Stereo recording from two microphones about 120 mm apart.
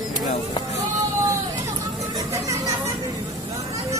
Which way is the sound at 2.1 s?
30° right (ahead or behind).